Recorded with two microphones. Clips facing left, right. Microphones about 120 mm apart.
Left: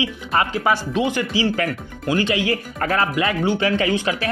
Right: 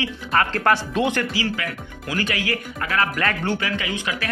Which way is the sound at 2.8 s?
35° left (ahead or behind).